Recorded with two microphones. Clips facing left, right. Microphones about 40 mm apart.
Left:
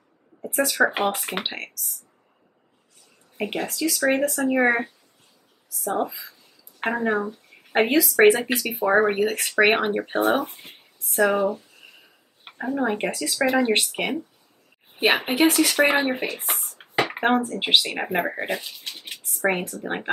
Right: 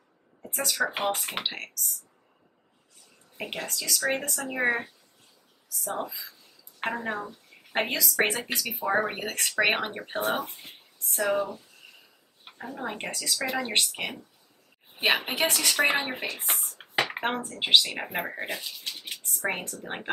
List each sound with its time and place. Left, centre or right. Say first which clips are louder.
0.4 s speech: left 8 dB; left
0.9 s speech: left 4 dB; left
3.3 s speech: left 7 dB; centre
4.1 s speech: left 9 dB; left
5.9 s speech: left 8 dB; left
6.8 s a woman's voice: left 7 dB; left
9.2 s speech: left 7 dB; centre
11.1 s speech: left 7 dB; left; by 16.3 s centre
16.3 s a sound: left 2 dB; centre
17.5 s speech: left 2 dB; left